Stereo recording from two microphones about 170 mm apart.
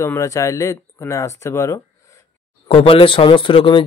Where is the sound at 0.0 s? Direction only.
15° left (ahead or behind).